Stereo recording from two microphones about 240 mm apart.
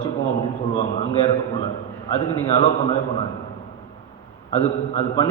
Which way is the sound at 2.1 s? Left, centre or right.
Left.